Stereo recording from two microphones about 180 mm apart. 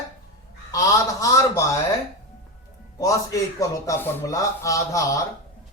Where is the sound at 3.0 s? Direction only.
20° left (ahead or behind).